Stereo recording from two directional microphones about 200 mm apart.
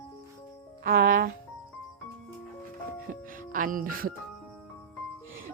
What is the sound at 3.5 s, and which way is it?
Speech, 40° right (ahead or behind).